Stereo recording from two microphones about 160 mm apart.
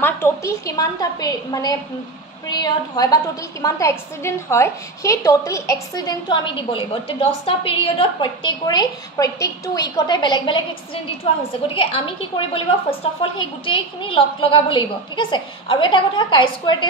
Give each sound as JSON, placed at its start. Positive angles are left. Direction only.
{"t": 0.0, "sound": "a woman's voice", "side_deg": 15}
{"t": 11.7, "sound": "a woman's voice", "side_deg": 35}